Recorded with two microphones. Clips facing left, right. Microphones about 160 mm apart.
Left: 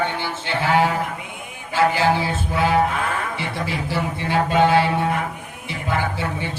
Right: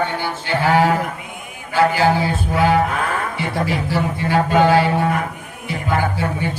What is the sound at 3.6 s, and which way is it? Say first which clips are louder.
A man's voice: right 3 dB; 25° left (ahead or behind).